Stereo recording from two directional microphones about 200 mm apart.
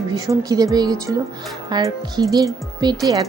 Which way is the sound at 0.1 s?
15° right (ahead or behind).